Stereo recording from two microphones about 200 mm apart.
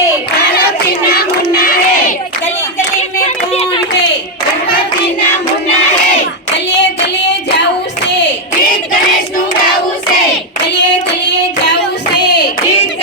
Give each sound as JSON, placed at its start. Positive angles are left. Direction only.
{"t": 1.2, "sound": "child singing", "side_deg": 45}
{"t": 3.2, "sound": "a sound", "side_deg": 30}
{"t": 12.1, "sound": "hands", "side_deg": 20}